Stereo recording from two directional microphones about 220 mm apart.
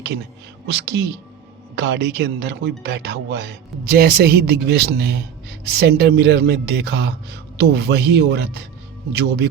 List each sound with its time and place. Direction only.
0.7 s speech: 50° right (ahead or behind)